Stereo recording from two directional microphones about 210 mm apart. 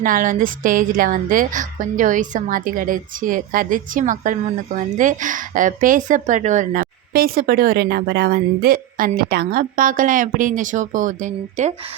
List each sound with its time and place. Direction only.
0.0 s a woman's voice: 40° right (ahead or behind)